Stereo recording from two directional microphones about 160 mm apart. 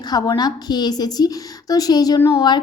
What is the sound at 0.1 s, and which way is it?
A woman's voice, 25° left (ahead or behind).